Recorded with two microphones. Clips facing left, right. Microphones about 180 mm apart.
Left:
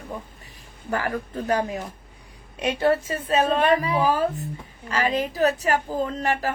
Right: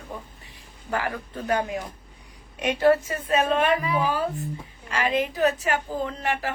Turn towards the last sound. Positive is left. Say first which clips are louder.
# left 3 dB
turn(degrees=40)  # may be behind; listen again after turning